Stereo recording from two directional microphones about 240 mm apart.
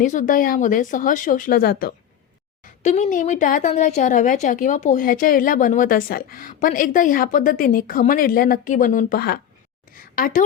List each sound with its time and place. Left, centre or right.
0.0 s a woman's voice: left